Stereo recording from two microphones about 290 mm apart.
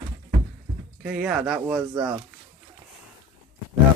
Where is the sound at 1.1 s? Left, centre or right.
Centre.